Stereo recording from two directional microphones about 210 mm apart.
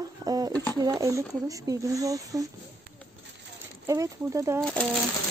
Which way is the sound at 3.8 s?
15° right (ahead or behind).